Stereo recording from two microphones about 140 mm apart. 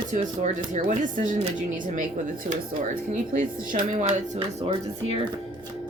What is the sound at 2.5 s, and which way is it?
Speech, 70° right (ahead or behind).